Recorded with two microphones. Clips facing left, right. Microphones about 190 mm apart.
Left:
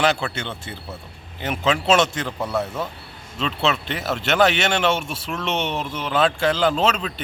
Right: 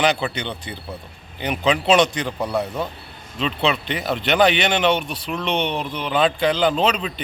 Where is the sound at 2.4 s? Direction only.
15° right (ahead or behind).